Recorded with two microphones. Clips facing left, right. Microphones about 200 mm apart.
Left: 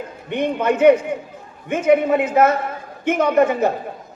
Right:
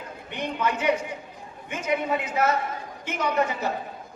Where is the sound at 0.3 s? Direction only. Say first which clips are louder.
Left 9 dB; 55° left (ahead or behind).